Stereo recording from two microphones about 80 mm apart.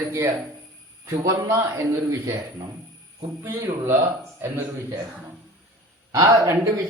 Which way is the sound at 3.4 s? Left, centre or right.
Right.